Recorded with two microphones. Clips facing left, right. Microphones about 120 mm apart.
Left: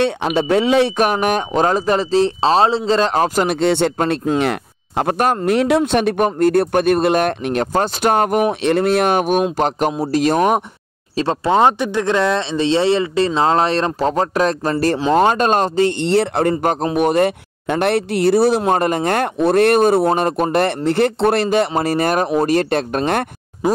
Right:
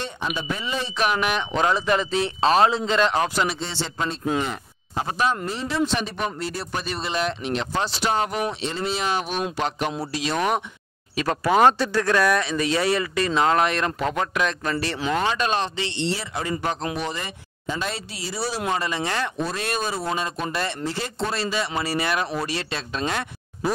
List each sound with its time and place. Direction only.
0.0 s speech: 70° left (ahead or behind)
0.9 s speech: 45° left (ahead or behind)
3.5 s speech: 65° left (ahead or behind)
4.4 s speech: 70° left (ahead or behind); by 10.6 s 45° left (ahead or behind)
11.1 s speech: 25° left (ahead or behind)
15.2 s speech: 45° left (ahead or behind)